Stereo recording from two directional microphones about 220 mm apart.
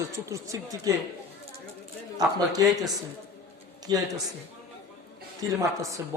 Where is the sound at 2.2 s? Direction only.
15° right (ahead or behind).